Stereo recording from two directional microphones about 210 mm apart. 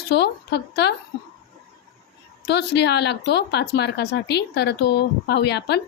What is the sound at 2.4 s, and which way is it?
Speech, 55° left (ahead or behind).